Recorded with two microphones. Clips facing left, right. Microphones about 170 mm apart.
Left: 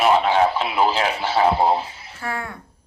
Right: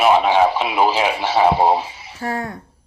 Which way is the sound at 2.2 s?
40° right (ahead or behind).